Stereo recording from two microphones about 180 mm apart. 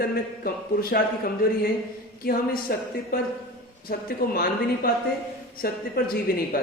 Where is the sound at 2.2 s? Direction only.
55° left (ahead or behind).